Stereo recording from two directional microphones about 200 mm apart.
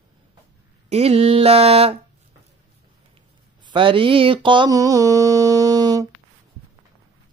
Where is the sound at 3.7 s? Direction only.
25° right (ahead or behind).